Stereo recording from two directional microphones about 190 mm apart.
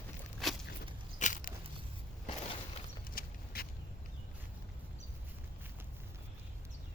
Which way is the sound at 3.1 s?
55° left (ahead or behind).